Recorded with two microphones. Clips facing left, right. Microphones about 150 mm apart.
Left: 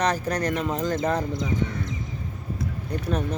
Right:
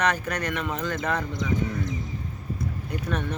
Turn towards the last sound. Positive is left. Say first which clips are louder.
# left 3 dB
turn(degrees=35)  # may be behind; listen again after turning